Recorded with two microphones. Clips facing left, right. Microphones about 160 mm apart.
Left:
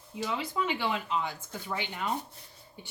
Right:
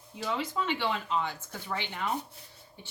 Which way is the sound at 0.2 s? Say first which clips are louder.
Even; 10° left (ahead or behind).